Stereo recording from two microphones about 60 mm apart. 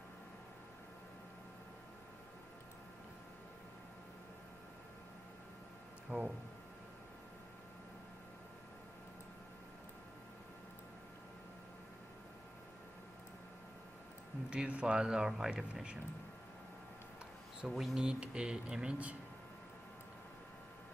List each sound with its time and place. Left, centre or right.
6.1 s speech: left
14.5 s speech: centre
17.6 s speech: centre; by 19.1 s right